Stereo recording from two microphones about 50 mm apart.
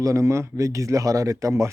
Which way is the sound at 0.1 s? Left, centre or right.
Right.